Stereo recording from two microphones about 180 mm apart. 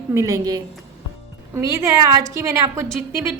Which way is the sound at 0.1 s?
20° right (ahead or behind).